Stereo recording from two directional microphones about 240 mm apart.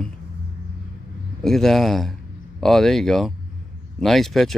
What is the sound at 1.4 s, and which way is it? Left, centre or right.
Speech, centre.